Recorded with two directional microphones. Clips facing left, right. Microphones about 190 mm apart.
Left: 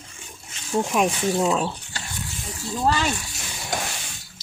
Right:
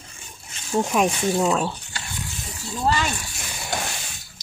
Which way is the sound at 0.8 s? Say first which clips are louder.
Right 1 dB; centre (ahead or behind).